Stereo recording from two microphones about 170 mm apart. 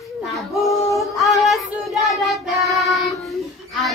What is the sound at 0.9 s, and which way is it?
Child singing, centre (ahead or behind).